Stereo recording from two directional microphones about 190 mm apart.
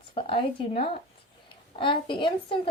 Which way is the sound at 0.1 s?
30° left (ahead or behind).